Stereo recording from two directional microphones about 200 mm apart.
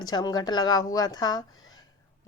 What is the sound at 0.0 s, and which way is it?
A woman's voice, 20° left (ahead or behind).